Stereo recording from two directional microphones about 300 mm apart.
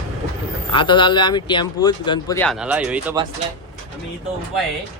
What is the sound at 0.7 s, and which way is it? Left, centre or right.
Speech, centre.